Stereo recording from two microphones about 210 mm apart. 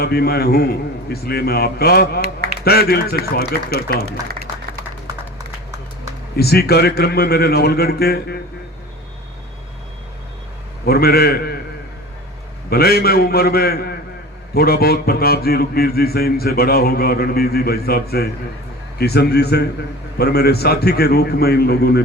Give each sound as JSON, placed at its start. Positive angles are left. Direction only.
{"t": 0.0, "sound": "a man's voice", "side_deg": 45}
{"t": 6.3, "sound": "a man's voice", "side_deg": 50}
{"t": 10.8, "sound": "a man's voice", "side_deg": 45}
{"t": 12.7, "sound": "a man's voice", "side_deg": 45}